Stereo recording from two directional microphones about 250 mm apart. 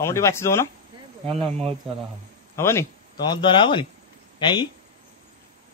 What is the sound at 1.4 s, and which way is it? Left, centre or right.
Speech, right.